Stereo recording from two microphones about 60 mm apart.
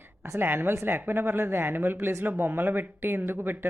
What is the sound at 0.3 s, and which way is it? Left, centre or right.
Speech, right.